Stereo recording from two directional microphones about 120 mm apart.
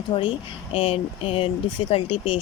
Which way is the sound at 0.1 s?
45° left (ahead or behind).